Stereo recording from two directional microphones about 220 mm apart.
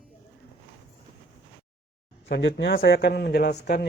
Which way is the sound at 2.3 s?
55° left (ahead or behind).